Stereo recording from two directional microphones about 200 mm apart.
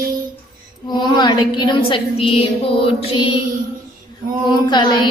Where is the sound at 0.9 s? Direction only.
20° left (ahead or behind).